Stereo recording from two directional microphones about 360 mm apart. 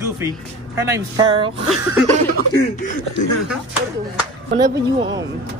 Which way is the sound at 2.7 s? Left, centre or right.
Left.